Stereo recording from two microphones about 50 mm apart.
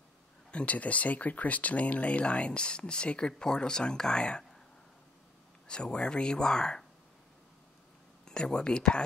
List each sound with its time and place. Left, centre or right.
0.5 s speech: left
5.7 s speech: centre
8.3 s speech: centre